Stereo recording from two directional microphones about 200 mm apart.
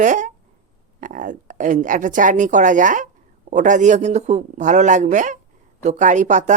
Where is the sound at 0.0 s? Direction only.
40° right (ahead or behind).